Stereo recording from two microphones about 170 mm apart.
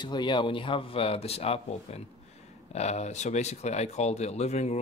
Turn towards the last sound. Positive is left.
turn(degrees=40)  # may be behind; listen again after turning